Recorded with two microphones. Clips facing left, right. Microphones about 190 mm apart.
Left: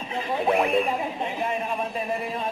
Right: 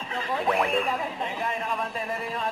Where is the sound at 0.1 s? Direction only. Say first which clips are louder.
Left 3 dB; 20° left (ahead or behind).